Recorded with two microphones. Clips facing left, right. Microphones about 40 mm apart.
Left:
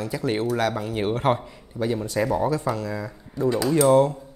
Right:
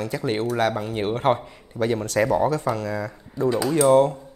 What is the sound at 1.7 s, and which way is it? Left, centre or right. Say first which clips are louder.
Speech: right 3 dB; right.